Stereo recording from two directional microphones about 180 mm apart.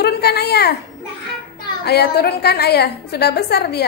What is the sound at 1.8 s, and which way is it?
A woman's voice, 65° left (ahead or behind).